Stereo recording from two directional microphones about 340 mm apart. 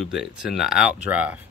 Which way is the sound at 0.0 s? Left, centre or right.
Centre.